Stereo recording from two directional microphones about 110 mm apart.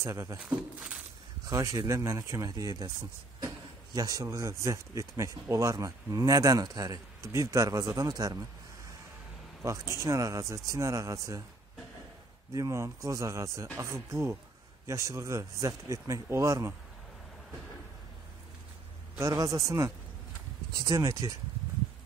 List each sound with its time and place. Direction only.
0.0 s speech: 25° right (ahead or behind)
0.6 s speech: 5° right (ahead or behind)
1.4 s speech: 30° right (ahead or behind)
3.9 s speech: 35° right (ahead or behind)
9.6 s speech: 30° right (ahead or behind)
12.5 s speech: 30° right (ahead or behind)
19.1 s speech: 35° right (ahead or behind)